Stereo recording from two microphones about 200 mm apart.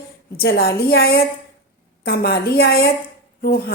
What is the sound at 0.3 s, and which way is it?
A woman's voice, 50° left (ahead or behind).